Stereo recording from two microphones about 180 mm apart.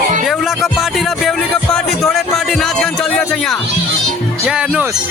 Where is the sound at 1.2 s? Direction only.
Centre (ahead or behind).